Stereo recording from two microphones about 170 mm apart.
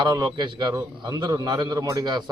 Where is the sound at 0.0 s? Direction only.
25° right (ahead or behind).